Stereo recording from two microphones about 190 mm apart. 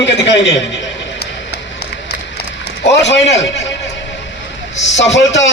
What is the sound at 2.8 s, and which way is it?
Speech, 70° left (ahead or behind).